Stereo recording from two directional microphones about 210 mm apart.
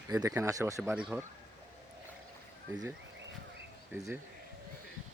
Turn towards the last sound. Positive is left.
turn(degrees=-10)  # may be behind; listen again after turning